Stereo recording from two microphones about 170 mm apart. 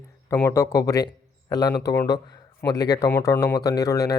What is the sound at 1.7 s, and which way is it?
Speech, 75° left (ahead or behind).